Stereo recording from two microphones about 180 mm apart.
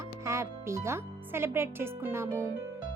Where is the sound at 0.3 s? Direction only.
15° right (ahead or behind).